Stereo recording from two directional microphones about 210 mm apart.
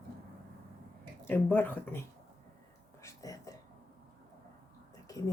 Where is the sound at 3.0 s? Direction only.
15° left (ahead or behind).